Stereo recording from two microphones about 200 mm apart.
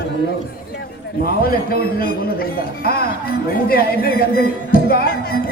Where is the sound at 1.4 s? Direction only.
50° left (ahead or behind).